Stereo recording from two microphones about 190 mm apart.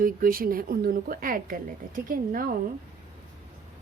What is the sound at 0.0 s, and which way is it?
A woman's voice, 50° right (ahead or behind).